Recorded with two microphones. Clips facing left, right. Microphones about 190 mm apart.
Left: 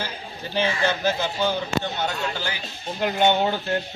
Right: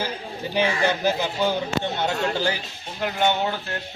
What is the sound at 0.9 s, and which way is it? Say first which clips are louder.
Speech: right 1 dB; 15° right (ahead or behind).